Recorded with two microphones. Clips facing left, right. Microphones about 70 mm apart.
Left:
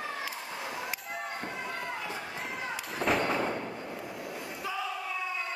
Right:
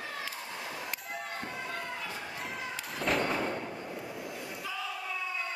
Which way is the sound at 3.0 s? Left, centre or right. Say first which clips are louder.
Left 2 dB; centre.